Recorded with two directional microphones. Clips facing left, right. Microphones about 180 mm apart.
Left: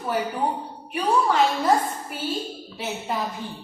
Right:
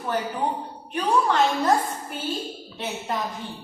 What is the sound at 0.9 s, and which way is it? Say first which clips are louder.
Speech: left 1 dB; 5° left (ahead or behind).